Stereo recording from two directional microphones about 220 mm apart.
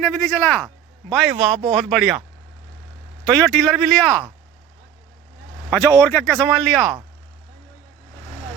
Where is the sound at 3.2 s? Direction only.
5° left (ahead or behind).